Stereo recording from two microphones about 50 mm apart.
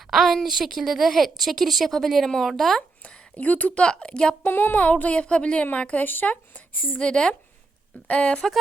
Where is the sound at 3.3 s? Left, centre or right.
Left.